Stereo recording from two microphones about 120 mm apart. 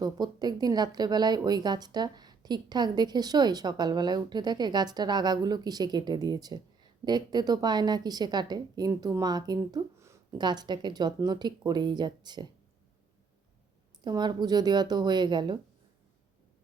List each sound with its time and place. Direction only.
0.0 s speech: 35° right (ahead or behind)
14.0 s speech: 35° right (ahead or behind)